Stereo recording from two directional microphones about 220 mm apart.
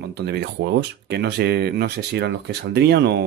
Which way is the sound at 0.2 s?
50° right (ahead or behind).